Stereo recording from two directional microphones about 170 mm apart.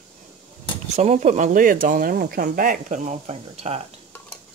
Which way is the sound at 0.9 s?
45° right (ahead or behind).